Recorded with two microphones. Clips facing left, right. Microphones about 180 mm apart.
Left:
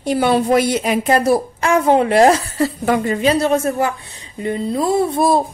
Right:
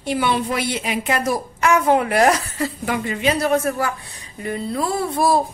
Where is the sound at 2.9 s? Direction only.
40° left (ahead or behind).